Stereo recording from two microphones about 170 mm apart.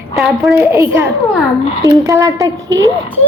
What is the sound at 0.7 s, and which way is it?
A woman's voice, 15° right (ahead or behind).